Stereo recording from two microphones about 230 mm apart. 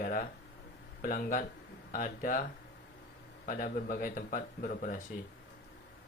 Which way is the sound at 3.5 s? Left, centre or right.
Left.